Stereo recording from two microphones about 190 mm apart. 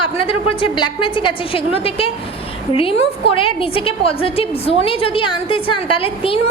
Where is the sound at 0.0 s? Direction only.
30° left (ahead or behind).